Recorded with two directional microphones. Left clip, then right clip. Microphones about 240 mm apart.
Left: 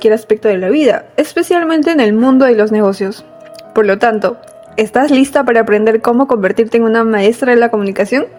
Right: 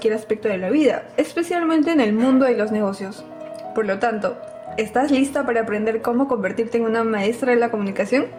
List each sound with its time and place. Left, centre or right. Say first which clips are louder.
0.0 s a woman's voice: left 10 dB; left